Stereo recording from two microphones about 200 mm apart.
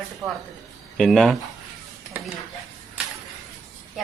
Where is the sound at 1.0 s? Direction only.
Centre (ahead or behind).